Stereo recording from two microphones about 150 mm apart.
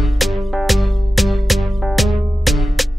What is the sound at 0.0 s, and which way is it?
Music, centre (ahead or behind).